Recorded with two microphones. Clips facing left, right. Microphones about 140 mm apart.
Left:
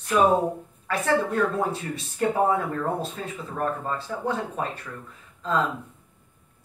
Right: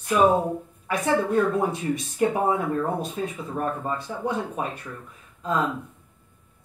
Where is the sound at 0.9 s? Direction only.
15° right (ahead or behind).